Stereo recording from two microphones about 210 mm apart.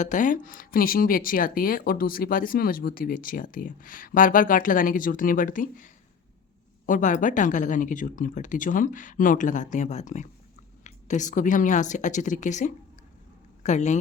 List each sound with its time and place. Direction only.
0.0 s a man's voice: 35° left (ahead or behind)